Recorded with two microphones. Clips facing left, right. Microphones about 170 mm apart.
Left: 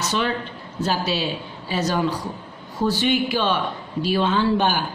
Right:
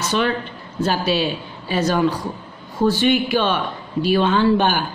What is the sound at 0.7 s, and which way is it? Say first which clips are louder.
Speech: right 4 dB; 60° right (ahead or behind).